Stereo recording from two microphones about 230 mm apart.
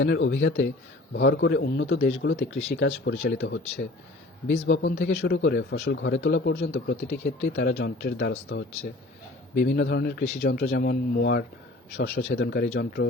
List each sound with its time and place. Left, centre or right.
0.0 s a man's voice: left
4.7 s a man's voice: left